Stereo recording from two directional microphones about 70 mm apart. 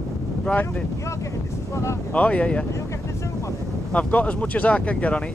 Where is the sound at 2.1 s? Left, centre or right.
Centre.